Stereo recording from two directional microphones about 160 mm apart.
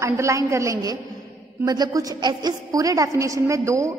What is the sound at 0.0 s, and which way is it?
A woman's voice, 20° right (ahead or behind).